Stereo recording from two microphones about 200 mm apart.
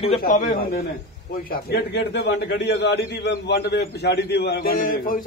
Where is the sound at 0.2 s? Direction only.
40° left (ahead or behind).